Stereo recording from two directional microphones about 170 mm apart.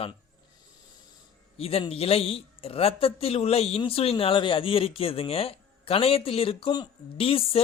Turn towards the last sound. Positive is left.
turn(degrees=35)  # may be behind; listen again after turning